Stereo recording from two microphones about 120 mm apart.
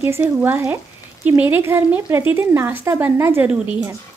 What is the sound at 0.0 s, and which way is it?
Speech, 20° right (ahead or behind).